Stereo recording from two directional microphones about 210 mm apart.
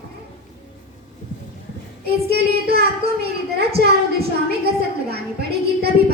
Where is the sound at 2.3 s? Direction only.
50° right (ahead or behind).